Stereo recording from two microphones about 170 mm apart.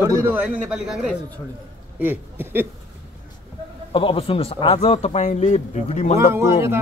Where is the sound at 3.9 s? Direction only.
30° left (ahead or behind).